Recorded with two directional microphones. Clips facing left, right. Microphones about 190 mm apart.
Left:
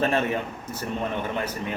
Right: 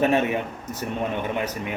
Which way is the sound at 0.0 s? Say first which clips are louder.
Right 3 dB; 15° right (ahead or behind).